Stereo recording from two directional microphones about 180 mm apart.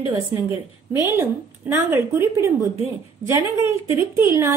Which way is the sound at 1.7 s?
15° right (ahead or behind).